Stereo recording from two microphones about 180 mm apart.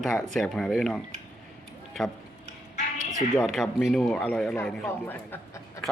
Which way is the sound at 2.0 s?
Centre (ahead or behind).